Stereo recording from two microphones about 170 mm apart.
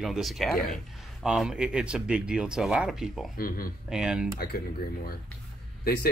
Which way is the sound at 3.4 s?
60° left (ahead or behind).